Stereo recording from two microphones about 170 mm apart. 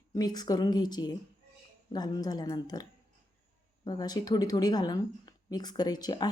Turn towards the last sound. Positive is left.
turn(degrees=25)  # may be behind; listen again after turning